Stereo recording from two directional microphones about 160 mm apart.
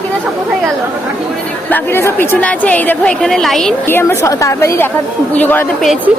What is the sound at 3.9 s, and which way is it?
A woman's voice, 15° left (ahead or behind).